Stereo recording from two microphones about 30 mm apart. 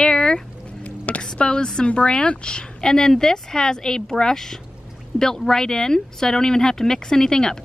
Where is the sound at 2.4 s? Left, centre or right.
Left.